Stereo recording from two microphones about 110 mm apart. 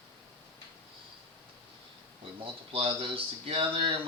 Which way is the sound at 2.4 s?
55° right (ahead or behind).